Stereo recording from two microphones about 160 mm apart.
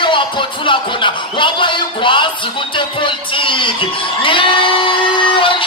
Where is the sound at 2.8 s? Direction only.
30° left (ahead or behind).